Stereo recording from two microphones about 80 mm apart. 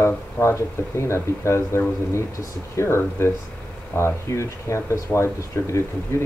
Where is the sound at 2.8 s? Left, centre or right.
Left.